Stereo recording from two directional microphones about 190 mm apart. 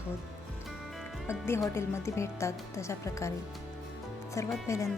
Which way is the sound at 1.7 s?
15° left (ahead or behind).